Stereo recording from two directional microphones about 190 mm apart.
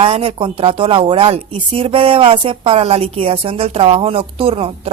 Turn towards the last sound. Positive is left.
turn(degrees=-30)  # may be behind; listen again after turning